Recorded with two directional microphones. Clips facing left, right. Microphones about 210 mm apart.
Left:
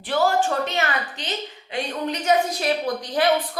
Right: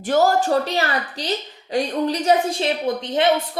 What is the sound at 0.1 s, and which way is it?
A woman's voice, 40° right (ahead or behind).